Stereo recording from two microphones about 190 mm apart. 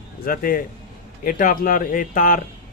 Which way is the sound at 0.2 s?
45° left (ahead or behind).